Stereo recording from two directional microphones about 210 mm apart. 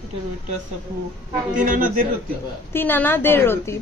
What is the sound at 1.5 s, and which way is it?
Speech, 40° right (ahead or behind).